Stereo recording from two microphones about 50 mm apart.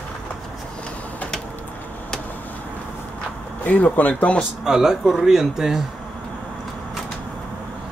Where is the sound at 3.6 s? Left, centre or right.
Left.